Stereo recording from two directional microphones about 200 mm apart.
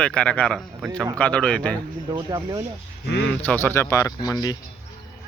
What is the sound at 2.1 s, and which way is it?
Speech, 20° right (ahead or behind).